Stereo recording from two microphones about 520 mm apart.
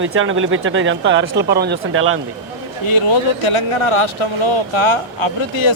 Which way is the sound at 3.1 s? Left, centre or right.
Left.